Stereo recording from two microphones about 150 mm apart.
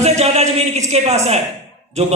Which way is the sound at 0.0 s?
45° right (ahead or behind).